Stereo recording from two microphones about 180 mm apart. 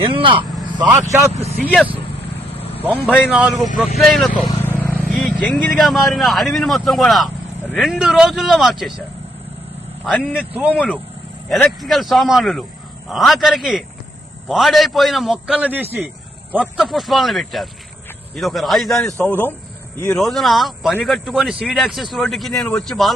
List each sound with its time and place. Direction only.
0.0 s speech: 30° right (ahead or behind)
0.5 s vehicle: 10° right (ahead or behind)
1.0 s speech: 15° right (ahead or behind)
1.6 s speech: 10° left (ahead or behind)
3.2 s speech: 5° right (ahead or behind)
4.8 s vehicle: 10° left (ahead or behind)
5.0 s speech: centre (ahead or behind)
10.0 s speech: 5° left (ahead or behind)
10.5 s speech: 10° right (ahead or behind)